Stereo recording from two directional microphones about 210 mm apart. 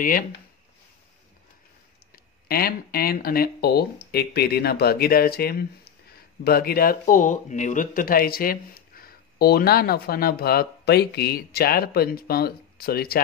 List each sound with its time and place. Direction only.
2.1 s speech: 45° left (ahead or behind)